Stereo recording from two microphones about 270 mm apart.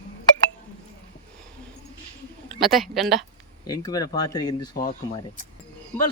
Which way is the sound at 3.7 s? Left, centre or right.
Centre.